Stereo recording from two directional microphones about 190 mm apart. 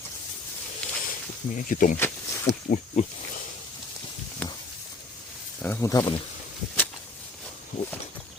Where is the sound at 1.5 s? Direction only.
45° left (ahead or behind).